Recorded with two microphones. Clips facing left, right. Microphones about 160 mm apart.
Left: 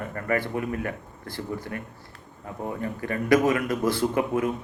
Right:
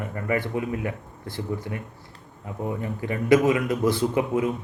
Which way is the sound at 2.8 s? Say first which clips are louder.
Right 1 dB; 20° right (ahead or behind).